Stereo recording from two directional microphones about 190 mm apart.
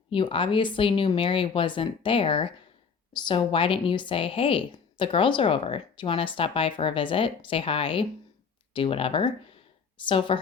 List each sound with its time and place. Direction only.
0.1 s a woman's voice: 25° left (ahead or behind)